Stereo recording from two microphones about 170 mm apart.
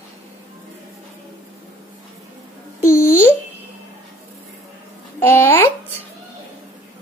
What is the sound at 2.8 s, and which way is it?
Babbling, 15° left (ahead or behind).